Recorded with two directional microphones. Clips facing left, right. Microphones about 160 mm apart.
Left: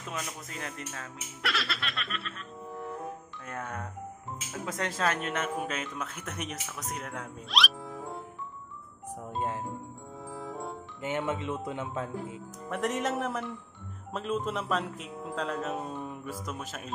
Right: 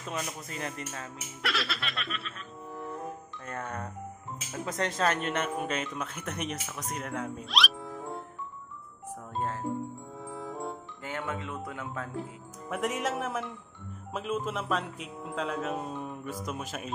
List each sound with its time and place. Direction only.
0.1 s speech: centre (ahead or behind)
9.1 s music: 15° left (ahead or behind)
10.2 s music: centre (ahead or behind)
11.0 s speech: 20° left (ahead or behind)
12.6 s speech: centre (ahead or behind)